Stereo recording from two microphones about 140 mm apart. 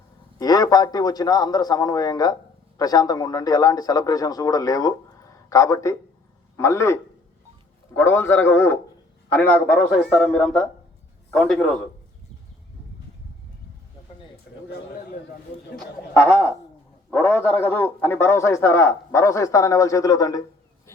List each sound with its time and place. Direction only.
0.3 s a man's voice: 25° left (ahead or behind); by 11.9 s centre (ahead or behind)
16.1 s a man's voice: 20° left (ahead or behind)